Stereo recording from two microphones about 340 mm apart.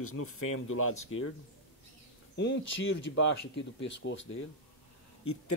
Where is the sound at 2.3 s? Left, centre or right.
Left.